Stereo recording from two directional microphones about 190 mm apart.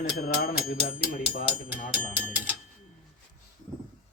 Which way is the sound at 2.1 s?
10° right (ahead or behind).